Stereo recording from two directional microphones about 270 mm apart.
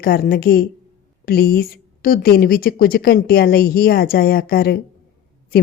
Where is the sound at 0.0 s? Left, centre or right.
Left.